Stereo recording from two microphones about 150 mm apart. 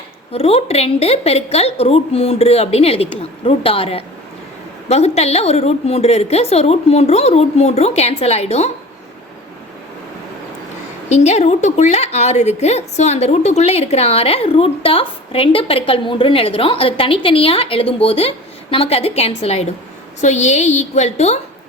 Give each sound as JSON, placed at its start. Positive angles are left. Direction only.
{"t": 0.3, "sound": "a woman's voice", "side_deg": 40}
{"t": 11.1, "sound": "a woman's voice", "side_deg": 50}